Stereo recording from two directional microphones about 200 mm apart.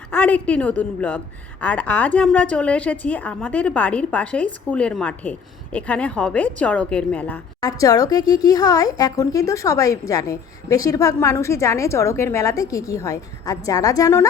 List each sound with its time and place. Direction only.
0.1 s a woman's voice: 10° left (ahead or behind)